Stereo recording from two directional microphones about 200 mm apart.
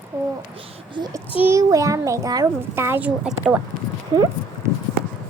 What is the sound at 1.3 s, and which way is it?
A child's voice, 10° right (ahead or behind).